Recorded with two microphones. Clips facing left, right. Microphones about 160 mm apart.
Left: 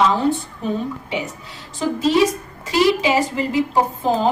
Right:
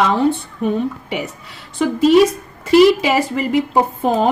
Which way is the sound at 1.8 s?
60° right (ahead or behind).